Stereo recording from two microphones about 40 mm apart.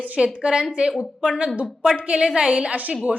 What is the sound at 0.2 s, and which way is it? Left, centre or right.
Speech, centre.